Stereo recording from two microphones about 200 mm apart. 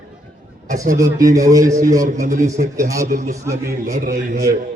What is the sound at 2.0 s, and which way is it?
A man's voice, 40° right (ahead or behind).